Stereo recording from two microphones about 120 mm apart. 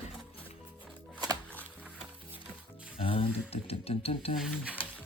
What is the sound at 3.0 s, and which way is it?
Speech, 50° left (ahead or behind).